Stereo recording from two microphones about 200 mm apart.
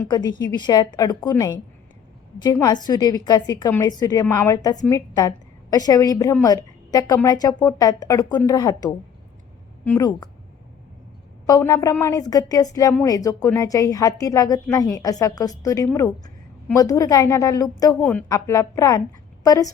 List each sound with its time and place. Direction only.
0.0 s a woman's voice: 20° left (ahead or behind)
11.4 s a woman's voice: 15° left (ahead or behind)
18.0 s a woman's voice: 5° left (ahead or behind)